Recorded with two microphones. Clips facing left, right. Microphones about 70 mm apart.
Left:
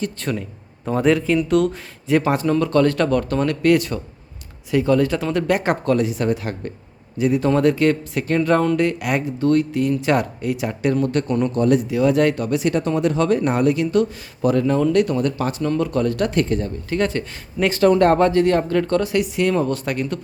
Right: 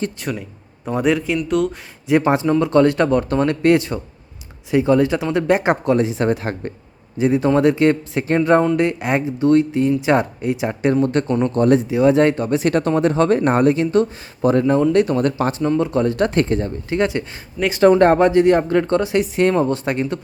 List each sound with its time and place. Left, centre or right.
0.2 s speech: centre
2.0 s speech: centre
12.6 s speech: right